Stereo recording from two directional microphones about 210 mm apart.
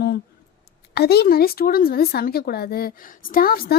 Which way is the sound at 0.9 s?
50° left (ahead or behind).